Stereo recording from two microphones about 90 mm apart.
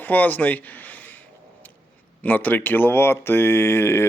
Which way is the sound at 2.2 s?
20° left (ahead or behind).